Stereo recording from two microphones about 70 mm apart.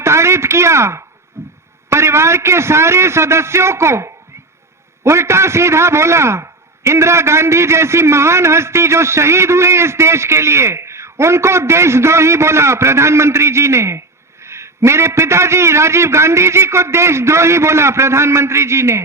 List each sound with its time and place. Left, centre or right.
0.0 s speech: right
1.4 s music: right
1.9 s a man's voice: right